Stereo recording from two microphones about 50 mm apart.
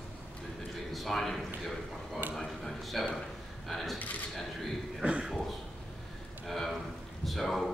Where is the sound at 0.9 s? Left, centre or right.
Centre.